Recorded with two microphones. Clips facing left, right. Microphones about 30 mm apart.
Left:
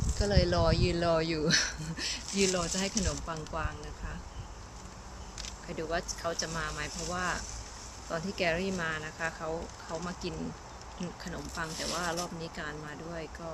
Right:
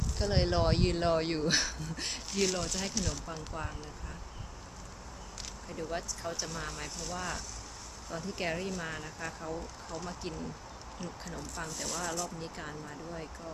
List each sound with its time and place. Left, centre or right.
0.2 s speech: centre
3.5 s speech: centre
5.7 s speech: left
8.1 s speech: left
11.0 s speech: centre
11.5 s speech: left
12.4 s speech: centre